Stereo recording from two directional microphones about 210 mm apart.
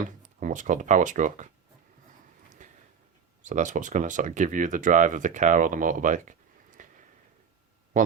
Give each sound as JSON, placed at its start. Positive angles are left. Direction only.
{"t": 0.0, "sound": "speech", "side_deg": -40}
{"t": 2.6, "sound": "a sound", "side_deg": -35}
{"t": 3.4, "sound": "speech", "side_deg": -35}